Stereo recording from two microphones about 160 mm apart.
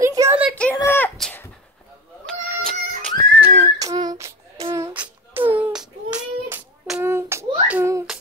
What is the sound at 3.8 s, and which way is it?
Music, 25° right (ahead or behind).